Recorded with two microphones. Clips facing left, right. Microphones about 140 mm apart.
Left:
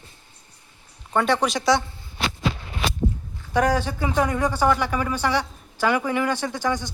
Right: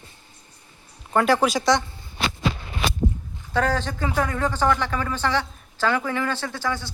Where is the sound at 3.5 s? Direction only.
15° left (ahead or behind).